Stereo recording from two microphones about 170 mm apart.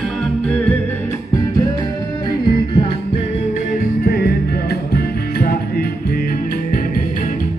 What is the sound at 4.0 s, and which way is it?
Music, 65° left (ahead or behind).